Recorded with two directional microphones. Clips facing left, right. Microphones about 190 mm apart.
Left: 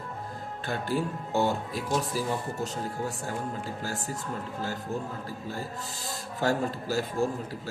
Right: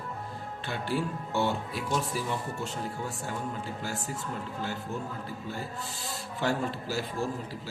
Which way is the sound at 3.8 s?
40° left (ahead or behind).